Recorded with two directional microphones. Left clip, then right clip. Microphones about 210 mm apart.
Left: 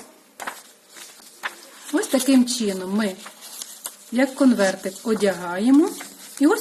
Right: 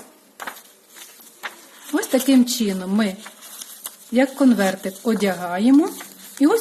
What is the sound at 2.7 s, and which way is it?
Speech, 35° right (ahead or behind).